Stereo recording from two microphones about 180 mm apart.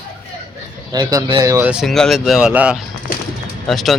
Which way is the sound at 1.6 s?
5° right (ahead or behind).